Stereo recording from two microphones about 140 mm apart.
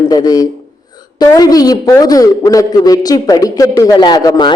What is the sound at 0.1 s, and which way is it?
A man's voice, 25° left (ahead or behind).